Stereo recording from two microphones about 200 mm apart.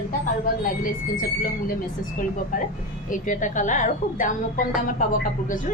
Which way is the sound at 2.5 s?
45° left (ahead or behind).